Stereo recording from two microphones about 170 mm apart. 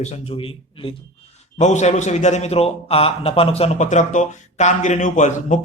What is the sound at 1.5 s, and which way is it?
A man's voice, 45° left (ahead or behind).